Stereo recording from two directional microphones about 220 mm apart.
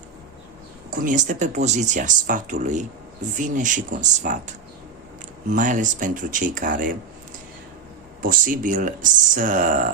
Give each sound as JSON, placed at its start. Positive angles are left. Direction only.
{"t": 0.9, "sound": "speech", "side_deg": -35}
{"t": 8.2, "sound": "speech", "side_deg": -35}